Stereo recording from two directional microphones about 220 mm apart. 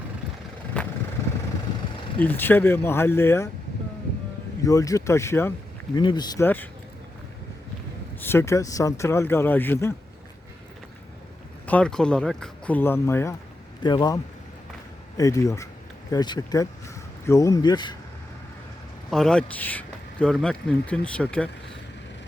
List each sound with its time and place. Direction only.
0.7 s vehicle: 5° left (ahead or behind)
2.1 s speech: 10° left (ahead or behind)
4.6 s speech: 15° left (ahead or behind)
8.2 s speech: 10° left (ahead or behind)
11.6 s speech: 5° left (ahead or behind)
15.2 s speech: 15° left (ahead or behind)
19.1 s speech: 5° left (ahead or behind)